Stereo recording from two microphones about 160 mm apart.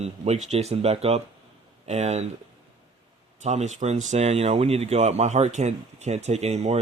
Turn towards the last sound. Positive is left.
turn(degrees=-40)  # may be behind; listen again after turning